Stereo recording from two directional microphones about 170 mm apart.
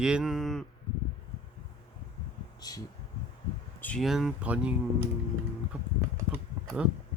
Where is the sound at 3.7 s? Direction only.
5° left (ahead or behind).